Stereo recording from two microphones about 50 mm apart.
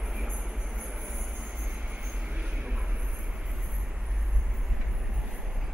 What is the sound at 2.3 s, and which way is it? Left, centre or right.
Train, right.